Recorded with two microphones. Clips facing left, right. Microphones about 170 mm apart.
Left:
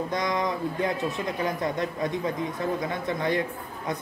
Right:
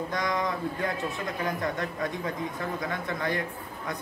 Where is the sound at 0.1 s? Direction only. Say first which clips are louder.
Left 1 dB; 20° left (ahead or behind).